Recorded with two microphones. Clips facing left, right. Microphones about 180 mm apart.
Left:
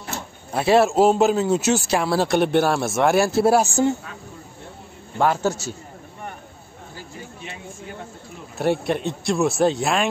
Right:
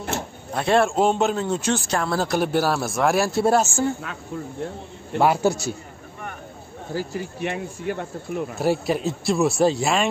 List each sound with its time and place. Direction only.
0.5 s a man's voice: 5° left (ahead or behind)
5.2 s a man's voice: 10° right (ahead or behind)
6.9 s speech: 80° right
8.5 s a man's voice: centre (ahead or behind)